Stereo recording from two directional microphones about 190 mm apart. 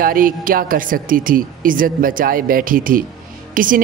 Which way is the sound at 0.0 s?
45° right (ahead or behind).